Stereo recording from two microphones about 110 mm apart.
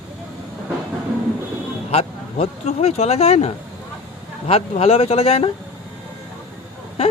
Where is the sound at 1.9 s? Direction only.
65° left (ahead or behind).